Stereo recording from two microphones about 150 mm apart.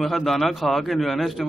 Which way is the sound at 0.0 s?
Centre (ahead or behind).